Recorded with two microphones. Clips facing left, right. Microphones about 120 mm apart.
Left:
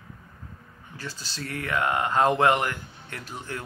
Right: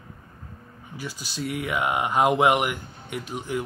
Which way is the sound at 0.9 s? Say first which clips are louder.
Right 3 dB; 15° right (ahead or behind).